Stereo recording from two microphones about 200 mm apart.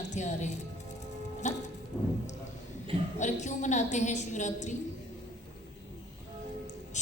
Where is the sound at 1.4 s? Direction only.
35° left (ahead or behind).